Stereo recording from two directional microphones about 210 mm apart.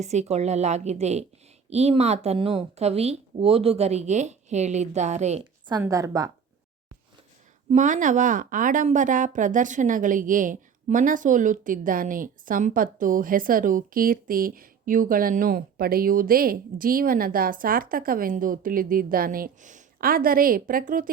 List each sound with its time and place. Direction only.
0.0 s a woman's voice: 35° right (ahead or behind)
5.8 s a woman's voice: 15° right (ahead or behind)
7.7 s a woman's voice: 35° right (ahead or behind)